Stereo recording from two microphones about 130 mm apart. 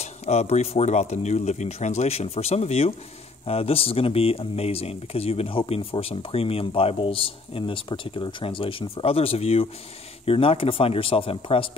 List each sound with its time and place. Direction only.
0.0 s speech: 55° left (ahead or behind)